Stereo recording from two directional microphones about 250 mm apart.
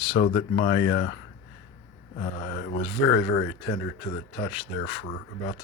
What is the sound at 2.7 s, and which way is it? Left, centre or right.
Speech, left.